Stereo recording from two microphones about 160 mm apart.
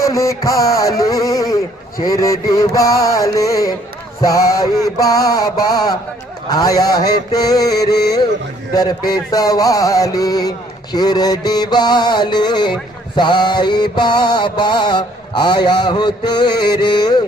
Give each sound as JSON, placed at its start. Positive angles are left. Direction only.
{"t": 0.0, "sound": "mantra", "side_deg": 20}